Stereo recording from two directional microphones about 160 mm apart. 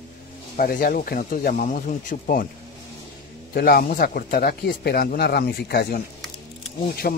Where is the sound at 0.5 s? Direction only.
65° left (ahead or behind).